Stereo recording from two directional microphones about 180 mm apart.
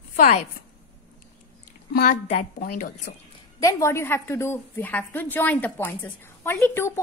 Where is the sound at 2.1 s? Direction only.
45° left (ahead or behind).